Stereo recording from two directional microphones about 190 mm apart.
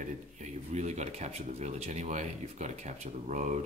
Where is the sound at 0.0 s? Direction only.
40° right (ahead or behind).